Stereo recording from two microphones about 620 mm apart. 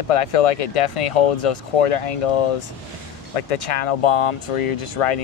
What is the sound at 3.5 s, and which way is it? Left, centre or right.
Speech, left.